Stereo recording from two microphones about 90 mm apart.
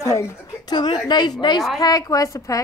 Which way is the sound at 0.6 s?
50° left (ahead or behind).